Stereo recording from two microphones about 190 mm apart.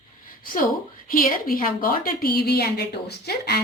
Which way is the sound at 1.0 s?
50° left (ahead or behind).